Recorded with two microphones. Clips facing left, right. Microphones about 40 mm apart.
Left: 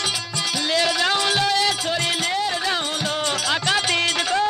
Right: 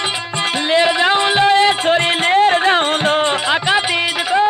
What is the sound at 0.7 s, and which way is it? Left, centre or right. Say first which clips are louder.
Music: right 7 dB; right.